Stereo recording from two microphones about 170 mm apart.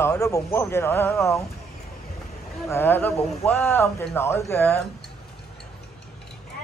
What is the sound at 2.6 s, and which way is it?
Speech, 15° left (ahead or behind).